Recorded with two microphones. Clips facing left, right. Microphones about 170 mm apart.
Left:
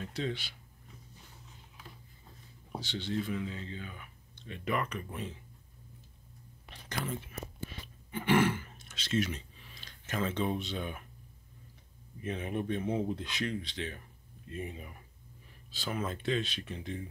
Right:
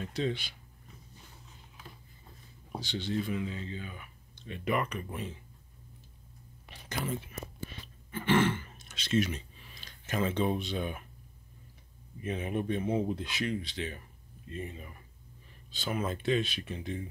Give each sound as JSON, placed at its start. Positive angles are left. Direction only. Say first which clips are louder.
{"t": 0.0, "sound": "speech", "louder": "right 3 dB", "side_deg": -20}
{"t": 2.7, "sound": "speech", "louder": "right 2 dB", "side_deg": -15}
{"t": 8.1, "sound": "throat clearing", "louder": "even", "side_deg": 15}
{"t": 8.7, "sound": "a sound", "louder": "right 3 dB", "side_deg": -15}
{"t": 12.2, "sound": "speech", "louder": "right 2 dB", "side_deg": -10}
{"t": 14.5, "sound": "speech", "louder": "even", "side_deg": 10}
{"t": 15.7, "sound": "speech", "louder": "right 2 dB", "side_deg": 0}
{"t": 16.0, "sound": "speech", "louder": "right 3 dB", "side_deg": -10}